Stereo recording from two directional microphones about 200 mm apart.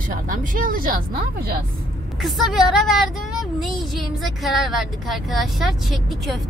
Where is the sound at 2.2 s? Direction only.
Centre (ahead or behind).